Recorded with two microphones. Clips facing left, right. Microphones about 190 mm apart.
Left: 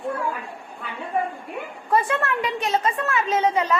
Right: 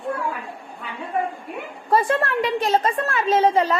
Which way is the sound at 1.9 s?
35° right (ahead or behind).